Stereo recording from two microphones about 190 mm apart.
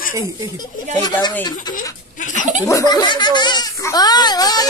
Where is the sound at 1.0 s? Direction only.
25° left (ahead or behind).